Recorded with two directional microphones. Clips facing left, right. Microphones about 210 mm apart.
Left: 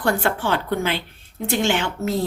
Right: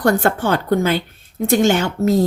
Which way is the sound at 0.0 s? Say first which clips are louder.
Right 5 dB; 40° right (ahead or behind).